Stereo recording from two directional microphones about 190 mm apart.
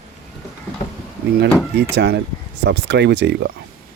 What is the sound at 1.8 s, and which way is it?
Speech, 60° right (ahead or behind).